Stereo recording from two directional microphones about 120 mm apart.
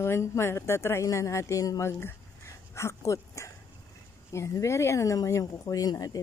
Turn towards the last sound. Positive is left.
turn(degrees=30)  # may be behind; listen again after turning